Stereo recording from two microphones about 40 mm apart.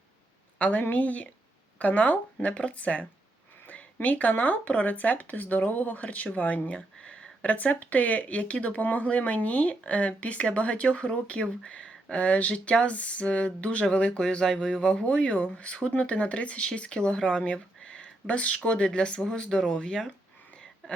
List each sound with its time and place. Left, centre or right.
0.6 s speech: left
6.7 s speech: left
7.4 s speech: left
14.2 s speech: left